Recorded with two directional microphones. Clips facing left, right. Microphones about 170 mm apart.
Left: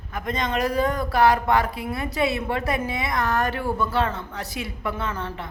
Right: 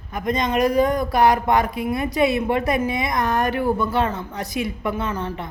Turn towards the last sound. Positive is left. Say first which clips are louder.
# right 4 dB
turn(degrees=-15)  # may be behind; listen again after turning